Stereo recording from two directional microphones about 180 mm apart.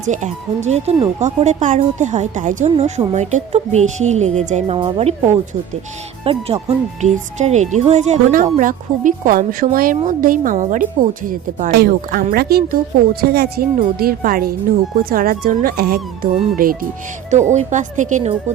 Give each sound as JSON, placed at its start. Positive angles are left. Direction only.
{"t": 0.0, "sound": "speech", "side_deg": -40}
{"t": 6.2, "sound": "speech", "side_deg": -35}
{"t": 11.7, "sound": "a woman's voice", "side_deg": -60}
{"t": 17.3, "sound": "speech", "side_deg": -40}